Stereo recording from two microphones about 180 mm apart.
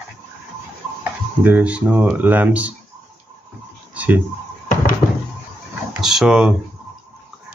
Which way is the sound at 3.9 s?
5° right (ahead or behind).